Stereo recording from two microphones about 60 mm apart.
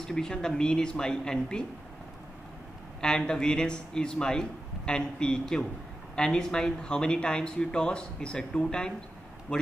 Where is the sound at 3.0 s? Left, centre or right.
Centre.